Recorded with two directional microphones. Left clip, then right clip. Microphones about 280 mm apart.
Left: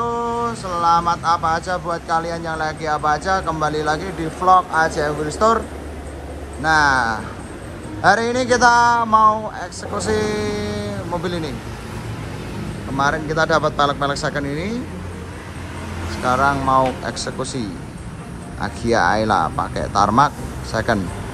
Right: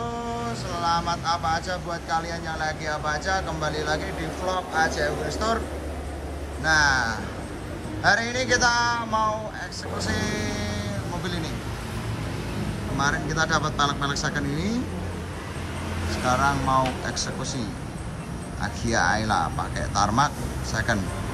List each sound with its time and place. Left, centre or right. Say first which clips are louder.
0.5 s speech: left 8 dB; centre
6.6 s a man's voice: left 5 dB; centre
12.9 s a man's voice: left 7 dB; centre
16.3 s a man's voice: left 6 dB; centre